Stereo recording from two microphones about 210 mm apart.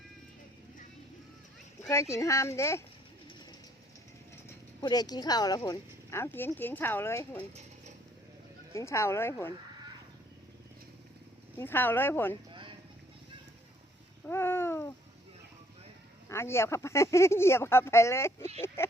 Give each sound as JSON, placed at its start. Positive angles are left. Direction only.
{"t": 1.8, "sound": "speech", "side_deg": 15}
{"t": 4.4, "sound": "speech", "side_deg": 20}
{"t": 8.7, "sound": "speech", "side_deg": 15}
{"t": 11.5, "sound": "speech", "side_deg": 10}
{"t": 12.5, "sound": "vehicle", "side_deg": -25}
{"t": 14.3, "sound": "babbling", "side_deg": 10}
{"t": 16.3, "sound": "speech", "side_deg": 10}